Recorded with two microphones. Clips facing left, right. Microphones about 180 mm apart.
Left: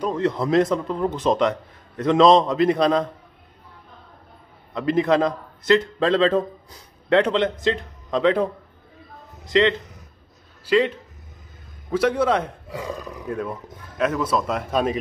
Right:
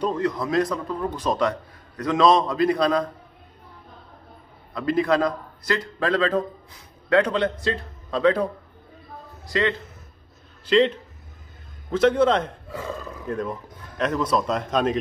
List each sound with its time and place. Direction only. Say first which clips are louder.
0.2 s a man's voice: left 3 dB; 25° left (ahead or behind)
4.7 s a man's voice: left 2 dB; 20° left (ahead or behind)
10.6 s speech: right 1 dB; 10° left (ahead or behind)
11.9 s speech: right 1 dB; 10° left (ahead or behind)